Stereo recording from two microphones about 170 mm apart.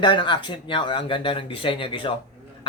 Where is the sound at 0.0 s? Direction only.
25° left (ahead or behind).